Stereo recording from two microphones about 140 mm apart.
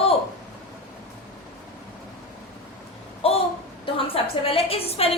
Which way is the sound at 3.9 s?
40° left (ahead or behind).